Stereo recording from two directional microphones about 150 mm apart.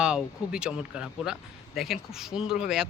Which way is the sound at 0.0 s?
5° right (ahead or behind).